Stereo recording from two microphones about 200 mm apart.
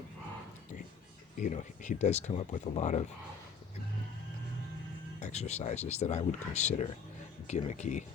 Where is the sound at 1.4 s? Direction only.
40° left (ahead or behind).